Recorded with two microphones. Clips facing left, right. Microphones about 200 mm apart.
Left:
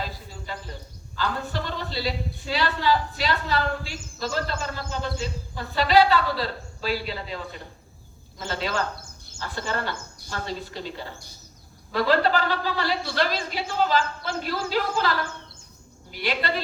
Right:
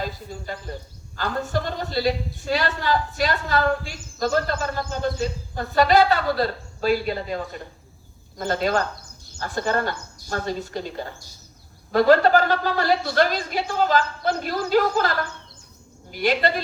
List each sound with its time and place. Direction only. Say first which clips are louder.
0.0 s a woman's voice: right 4 dB; 50° right (ahead or behind)